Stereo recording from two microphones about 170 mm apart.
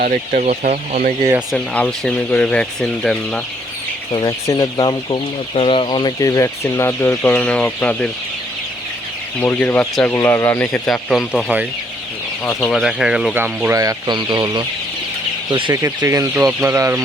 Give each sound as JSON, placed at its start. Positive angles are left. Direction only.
{"t": 0.0, "sound": "speech", "side_deg": -55}
{"t": 0.4, "sound": "speech", "side_deg": -40}
{"t": 1.5, "sound": "speech", "side_deg": 5}
{"t": 4.1, "sound": "chicken", "side_deg": 20}
{"t": 9.4, "sound": "speech", "side_deg": 10}
{"t": 10.8, "sound": "speech", "side_deg": 0}